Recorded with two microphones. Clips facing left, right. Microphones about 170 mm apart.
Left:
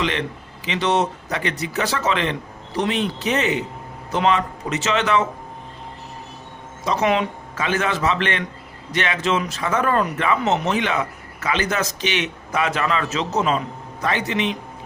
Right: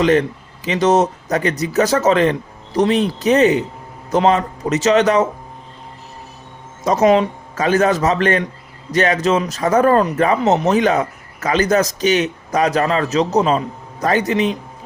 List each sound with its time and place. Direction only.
0.0 s speech: 40° right (ahead or behind)
6.8 s speech: 40° right (ahead or behind)